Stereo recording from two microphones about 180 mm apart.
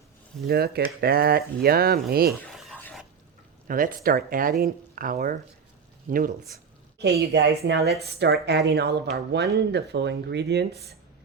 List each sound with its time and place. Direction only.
0.4 s speech: 60° right (ahead or behind)
2.5 s a sound: centre (ahead or behind)
2.8 s stir: centre (ahead or behind)
3.7 s speech: 50° right (ahead or behind)
7.0 s speech: 70° right (ahead or behind)